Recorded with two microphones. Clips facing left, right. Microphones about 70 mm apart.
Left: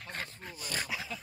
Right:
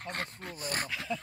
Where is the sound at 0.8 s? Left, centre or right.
Centre.